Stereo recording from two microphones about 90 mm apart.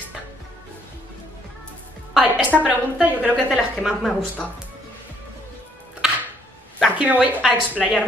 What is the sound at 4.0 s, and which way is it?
Speech, 5° left (ahead or behind).